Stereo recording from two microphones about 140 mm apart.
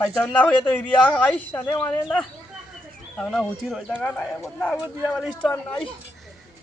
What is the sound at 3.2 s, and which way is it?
A man's voice, centre (ahead or behind).